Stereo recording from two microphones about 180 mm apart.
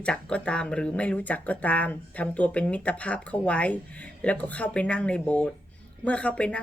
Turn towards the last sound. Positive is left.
turn(degrees=5)  # may be behind; listen again after turning